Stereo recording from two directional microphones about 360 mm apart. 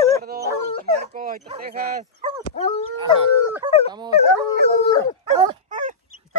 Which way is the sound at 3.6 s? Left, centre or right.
Centre.